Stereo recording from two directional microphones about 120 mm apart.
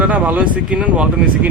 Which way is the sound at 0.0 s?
15° right (ahead or behind).